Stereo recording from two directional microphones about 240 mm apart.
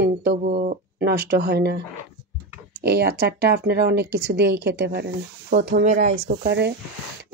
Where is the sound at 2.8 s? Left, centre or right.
Right.